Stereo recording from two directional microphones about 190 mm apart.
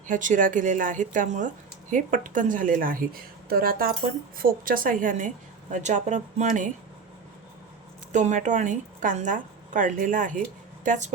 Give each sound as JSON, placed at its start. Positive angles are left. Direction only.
{"t": 0.1, "sound": "speech", "side_deg": -45}
{"t": 8.1, "sound": "speech", "side_deg": -40}